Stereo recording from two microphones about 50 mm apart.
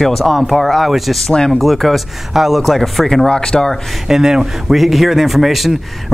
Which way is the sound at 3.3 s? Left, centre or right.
Centre.